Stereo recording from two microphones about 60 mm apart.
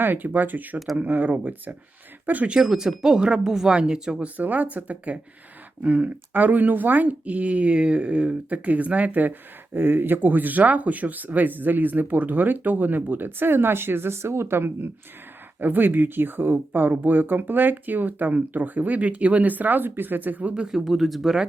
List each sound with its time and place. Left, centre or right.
0.0 s speech: right
2.6 s speech: centre
4.4 s speech: right
20.7 s speech: centre